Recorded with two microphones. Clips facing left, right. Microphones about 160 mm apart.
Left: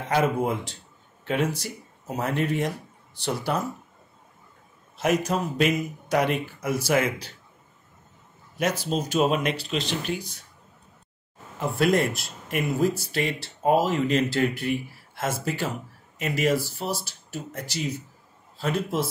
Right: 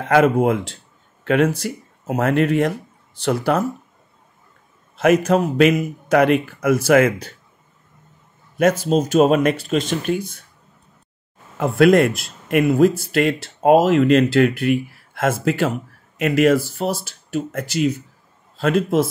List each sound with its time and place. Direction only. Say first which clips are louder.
0.1 s a man's voice: right 8 dB; 85° right
1.2 s speech: right 9 dB; 80° right
1.5 s a man's voice: right 8 dB; 65° right (ahead or behind); by 3.6 s 90° right
4.9 s a man's voice: right 9 dB; 90° right
8.5 s speech: right 9 dB; 50° right (ahead or behind)
11.5 s a man's voice: right 9 dB; 75° right (ahead or behind)
13.1 s a man's voice: right 9 dB; 90° right; by 16.5 s 75° right (ahead or behind)
17.0 s a man's voice: right 11 dB; 90° right